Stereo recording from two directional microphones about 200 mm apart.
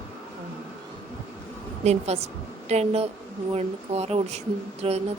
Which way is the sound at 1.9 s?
30° right (ahead or behind).